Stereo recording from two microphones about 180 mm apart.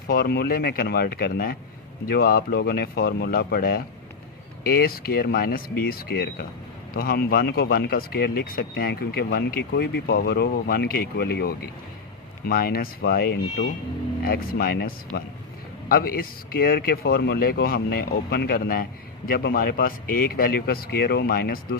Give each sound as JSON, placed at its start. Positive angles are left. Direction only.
{"t": 0.1, "sound": "speech", "side_deg": 60}